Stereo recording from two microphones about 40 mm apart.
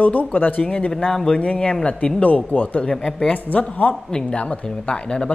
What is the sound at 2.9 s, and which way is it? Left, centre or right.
Speech, centre.